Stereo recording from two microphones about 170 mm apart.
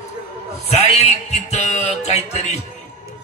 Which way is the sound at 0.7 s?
40° left (ahead or behind).